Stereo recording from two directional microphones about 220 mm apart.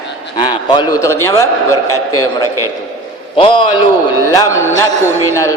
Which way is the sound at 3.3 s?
20° left (ahead or behind).